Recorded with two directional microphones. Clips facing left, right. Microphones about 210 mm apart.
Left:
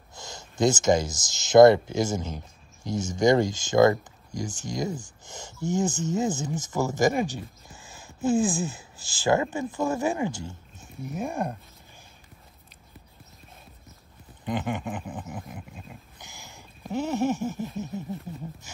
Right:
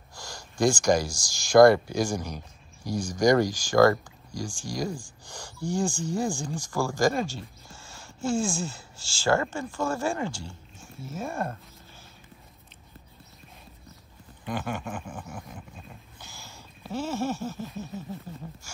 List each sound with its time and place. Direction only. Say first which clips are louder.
0.1 s speech: left 1 dB; 20° left (ahead or behind)
14.4 s speech: left 3 dB; 20° left (ahead or behind)
16.2 s a sound: even; 15° left (ahead or behind)